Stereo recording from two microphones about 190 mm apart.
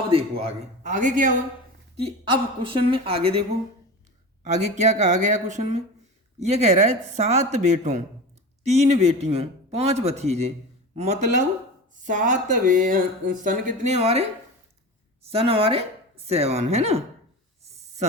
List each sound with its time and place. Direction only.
0.1 s a man's voice: 30° right (ahead or behind)
2.6 s speech: 30° right (ahead or behind)
4.5 s a man's voice: 35° right (ahead or behind)